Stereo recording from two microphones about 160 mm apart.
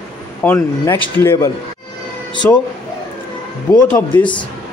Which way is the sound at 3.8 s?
10° left (ahead or behind).